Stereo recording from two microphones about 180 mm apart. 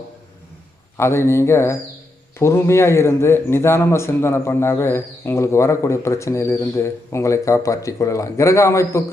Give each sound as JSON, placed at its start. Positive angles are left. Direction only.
{"t": 0.9, "sound": "a man's voice", "side_deg": 15}